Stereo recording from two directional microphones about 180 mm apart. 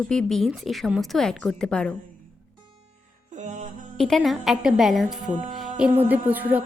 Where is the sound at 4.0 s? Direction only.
Centre (ahead or behind).